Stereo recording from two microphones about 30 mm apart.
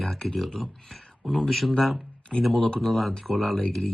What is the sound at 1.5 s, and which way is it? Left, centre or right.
Speech, centre.